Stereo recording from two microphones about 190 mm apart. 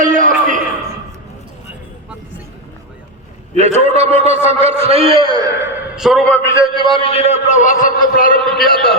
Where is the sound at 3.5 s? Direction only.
35° right (ahead or behind).